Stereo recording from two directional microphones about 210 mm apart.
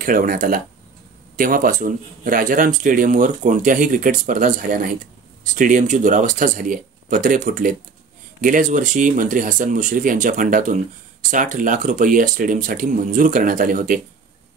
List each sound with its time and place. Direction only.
0.0 s a man's voice: 40° right (ahead or behind)